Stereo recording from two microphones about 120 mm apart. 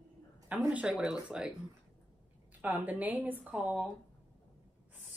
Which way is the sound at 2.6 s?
15° right (ahead or behind).